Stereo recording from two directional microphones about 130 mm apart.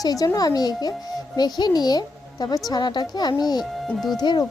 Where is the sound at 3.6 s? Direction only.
Centre (ahead or behind).